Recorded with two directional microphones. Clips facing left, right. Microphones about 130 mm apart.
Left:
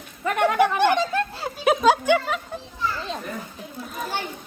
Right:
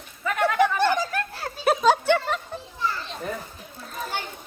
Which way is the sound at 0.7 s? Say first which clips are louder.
Left 3 dB; 20° left (ahead or behind).